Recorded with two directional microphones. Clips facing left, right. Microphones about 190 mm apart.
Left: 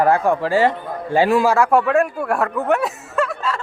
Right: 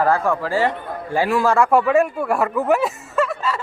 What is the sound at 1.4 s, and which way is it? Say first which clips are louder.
Snicker: even; 5° left (ahead or behind).